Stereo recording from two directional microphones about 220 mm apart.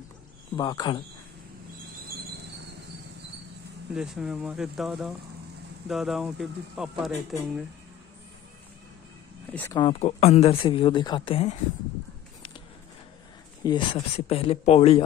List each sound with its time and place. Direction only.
0.6 s speech: 20° left (ahead or behind)
3.9 s speech: 5° right (ahead or behind)
9.5 s speech: 10° left (ahead or behind)
9.8 s speech: 25° left (ahead or behind)
13.7 s speech: 20° left (ahead or behind)